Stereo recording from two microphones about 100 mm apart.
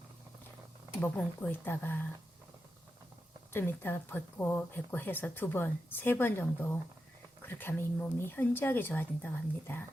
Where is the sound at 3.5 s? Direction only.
20° left (ahead or behind).